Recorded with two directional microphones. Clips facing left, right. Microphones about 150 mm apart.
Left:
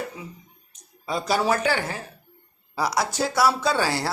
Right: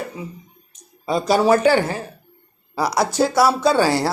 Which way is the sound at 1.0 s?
35° right (ahead or behind).